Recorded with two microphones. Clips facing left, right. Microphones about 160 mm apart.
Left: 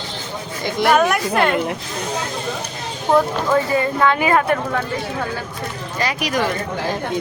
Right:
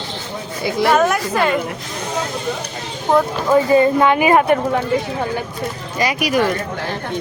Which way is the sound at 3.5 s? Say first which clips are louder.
Right 7 dB; 25° right (ahead or behind).